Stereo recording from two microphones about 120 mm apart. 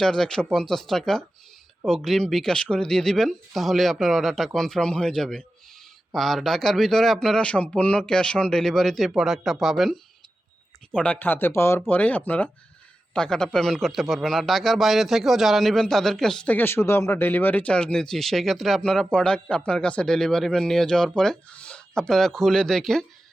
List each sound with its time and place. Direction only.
0.0 s a man's voice: 5° left (ahead or behind)
10.9 s a man's voice: 10° left (ahead or behind)